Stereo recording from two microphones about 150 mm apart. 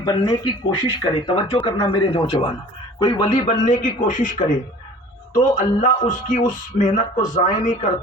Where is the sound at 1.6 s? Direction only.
25° left (ahead or behind).